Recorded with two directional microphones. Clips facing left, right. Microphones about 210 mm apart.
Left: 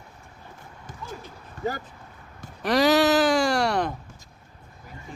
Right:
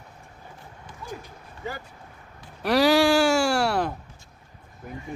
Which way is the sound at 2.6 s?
10° right (ahead or behind).